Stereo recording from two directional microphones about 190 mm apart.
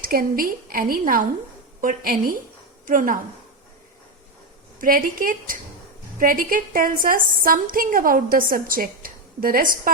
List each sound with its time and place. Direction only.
0.0 s a woman's voice: 50° right (ahead or behind)
4.8 s a woman's voice: 45° right (ahead or behind)